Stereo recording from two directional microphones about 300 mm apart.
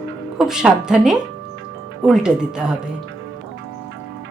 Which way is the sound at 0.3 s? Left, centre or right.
Centre.